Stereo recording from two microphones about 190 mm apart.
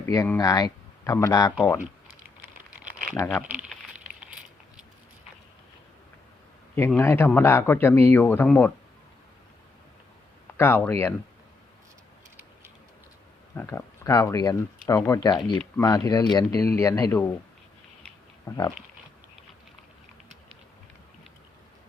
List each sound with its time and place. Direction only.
0.0 s speech: 15° left (ahead or behind)
3.5 s a sound: 5° right (ahead or behind)
6.7 s speech: 15° left (ahead or behind)
10.6 s speech: 10° left (ahead or behind)
13.6 s speech: 15° left (ahead or behind)
18.4 s speech: 15° left (ahead or behind)